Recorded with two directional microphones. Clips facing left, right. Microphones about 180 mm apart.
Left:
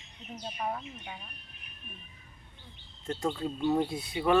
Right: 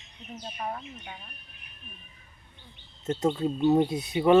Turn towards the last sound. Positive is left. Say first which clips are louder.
# right 6 dB
turn(degrees=-20)  # may be behind; listen again after turning